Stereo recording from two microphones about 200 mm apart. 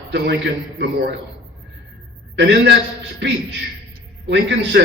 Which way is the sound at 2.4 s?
60° right (ahead or behind).